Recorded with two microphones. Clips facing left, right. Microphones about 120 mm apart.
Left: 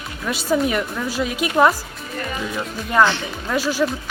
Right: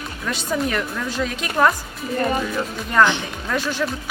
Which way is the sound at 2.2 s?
40° right (ahead or behind).